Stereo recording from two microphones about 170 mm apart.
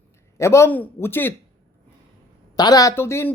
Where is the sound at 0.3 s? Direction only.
15° left (ahead or behind).